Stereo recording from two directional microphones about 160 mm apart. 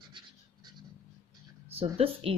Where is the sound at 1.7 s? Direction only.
35° right (ahead or behind).